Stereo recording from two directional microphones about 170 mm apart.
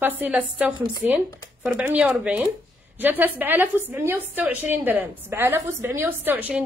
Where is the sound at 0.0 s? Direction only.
10° right (ahead or behind).